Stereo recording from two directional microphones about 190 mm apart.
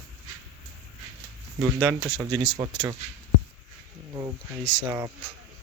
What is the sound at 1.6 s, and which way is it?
Speech, 15° right (ahead or behind).